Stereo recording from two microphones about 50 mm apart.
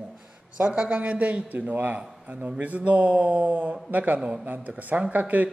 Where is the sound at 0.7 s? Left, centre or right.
Right.